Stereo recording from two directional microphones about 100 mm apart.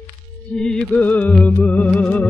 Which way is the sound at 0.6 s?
5° left (ahead or behind).